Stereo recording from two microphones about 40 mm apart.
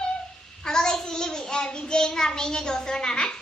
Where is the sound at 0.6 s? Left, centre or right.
Centre.